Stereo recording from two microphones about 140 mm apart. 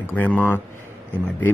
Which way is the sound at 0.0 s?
10° left (ahead or behind).